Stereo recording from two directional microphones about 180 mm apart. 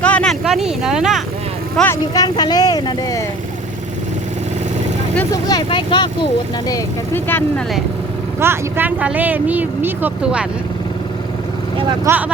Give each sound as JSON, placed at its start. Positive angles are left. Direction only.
{"t": 0.0, "sound": "vehicle", "side_deg": 5}
{"t": 1.7, "sound": "speech", "side_deg": 10}
{"t": 2.1, "sound": "speech", "side_deg": 20}
{"t": 5.3, "sound": "speech", "side_deg": 20}
{"t": 6.7, "sound": "speech", "side_deg": 15}
{"t": 8.4, "sound": "speech", "side_deg": -15}
{"t": 12.1, "sound": "speech", "side_deg": -15}